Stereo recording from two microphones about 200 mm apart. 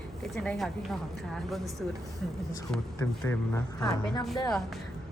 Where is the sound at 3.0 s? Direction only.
15° left (ahead or behind).